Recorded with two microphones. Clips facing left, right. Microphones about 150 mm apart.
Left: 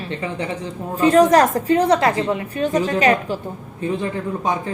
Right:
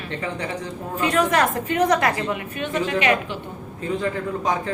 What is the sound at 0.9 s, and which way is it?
A woman's voice, 35° left (ahead or behind).